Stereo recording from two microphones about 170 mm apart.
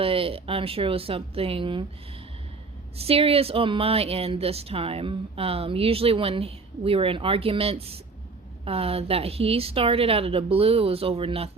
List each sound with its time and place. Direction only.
0.0 s speech: 35° right (ahead or behind)
3.0 s speech: 35° right (ahead or behind)